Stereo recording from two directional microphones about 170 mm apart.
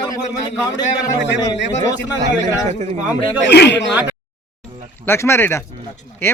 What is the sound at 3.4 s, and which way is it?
Speech, 85° left.